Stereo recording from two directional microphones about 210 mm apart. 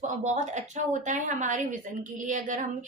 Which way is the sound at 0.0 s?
35° right (ahead or behind).